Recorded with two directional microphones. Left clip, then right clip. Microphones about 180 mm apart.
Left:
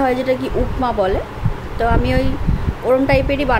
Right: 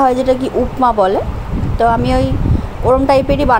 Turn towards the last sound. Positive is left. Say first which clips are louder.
# right 5 dB
turn(degrees=-20)  # may be behind; listen again after turning